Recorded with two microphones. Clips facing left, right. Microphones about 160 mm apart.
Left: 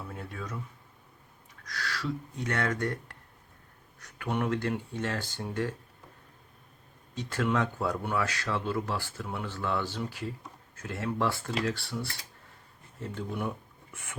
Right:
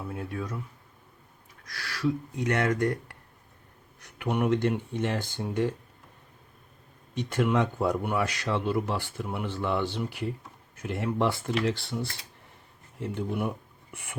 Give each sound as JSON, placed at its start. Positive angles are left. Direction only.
{"t": 0.0, "sound": "speech", "side_deg": -10}
{"t": 1.7, "sound": "speech", "side_deg": -10}
{"t": 7.1, "sound": "speech", "side_deg": -20}